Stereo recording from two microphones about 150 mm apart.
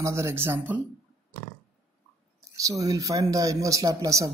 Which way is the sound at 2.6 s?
20° right (ahead or behind).